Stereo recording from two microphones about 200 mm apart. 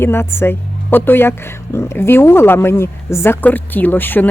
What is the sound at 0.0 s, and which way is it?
Speech, 10° left (ahead or behind).